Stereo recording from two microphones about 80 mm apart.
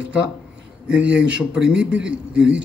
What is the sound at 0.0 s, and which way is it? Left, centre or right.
A man's voice, centre.